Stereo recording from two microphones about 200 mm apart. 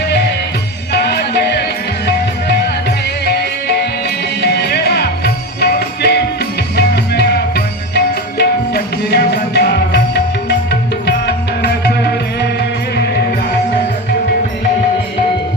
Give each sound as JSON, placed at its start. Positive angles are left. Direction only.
{"t": 0.9, "sound": "music", "side_deg": 55}
{"t": 3.2, "sound": "music", "side_deg": 55}